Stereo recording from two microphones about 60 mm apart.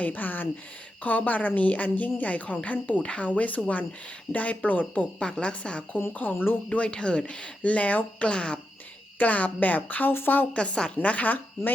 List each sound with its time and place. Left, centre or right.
0.0 s a woman's voice: left
5.2 s a woman's voice: centre
6.3 s speech: left
6.7 s a woman's voice: centre; by 10.4 s left
10.5 s a woman's voice: centre